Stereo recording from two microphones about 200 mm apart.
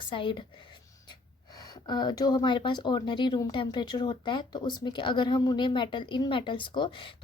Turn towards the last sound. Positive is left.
turn(degrees=25)  # may be behind; listen again after turning